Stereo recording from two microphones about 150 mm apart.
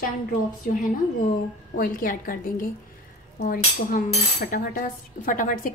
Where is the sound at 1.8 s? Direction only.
65° left (ahead or behind).